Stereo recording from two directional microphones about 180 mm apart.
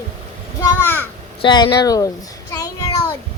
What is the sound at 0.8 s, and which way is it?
Speech, 10° left (ahead or behind).